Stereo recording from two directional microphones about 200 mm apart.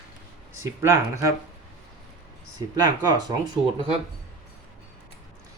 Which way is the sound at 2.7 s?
20° right (ahead or behind).